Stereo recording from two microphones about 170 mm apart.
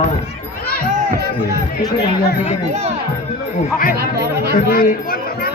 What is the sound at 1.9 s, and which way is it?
Speech, 70° left (ahead or behind).